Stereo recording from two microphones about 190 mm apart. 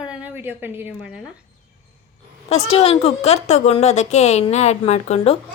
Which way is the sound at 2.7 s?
30° left (ahead or behind).